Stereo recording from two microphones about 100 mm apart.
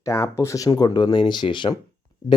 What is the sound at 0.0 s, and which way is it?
Speech, 30° left (ahead or behind).